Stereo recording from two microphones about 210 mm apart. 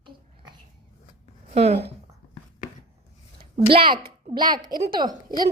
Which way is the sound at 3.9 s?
45° right (ahead or behind).